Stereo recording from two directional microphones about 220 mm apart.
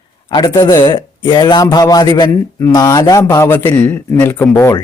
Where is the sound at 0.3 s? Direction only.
20° left (ahead or behind).